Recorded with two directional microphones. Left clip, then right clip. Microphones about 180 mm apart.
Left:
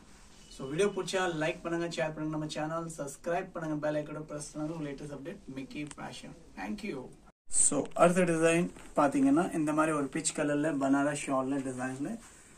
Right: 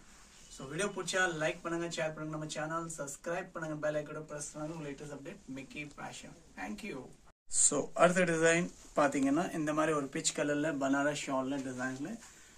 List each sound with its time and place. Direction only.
0.6 s speech: 10° right (ahead or behind)